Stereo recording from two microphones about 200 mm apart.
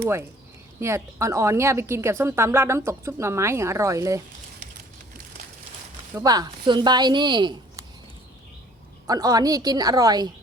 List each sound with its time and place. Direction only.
0.8 s a woman's voice: 15° right (ahead or behind)
6.1 s speech: 20° right (ahead or behind)
9.0 s speech: 20° right (ahead or behind)